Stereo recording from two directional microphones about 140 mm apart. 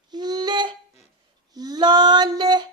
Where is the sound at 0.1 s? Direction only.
30° right (ahead or behind).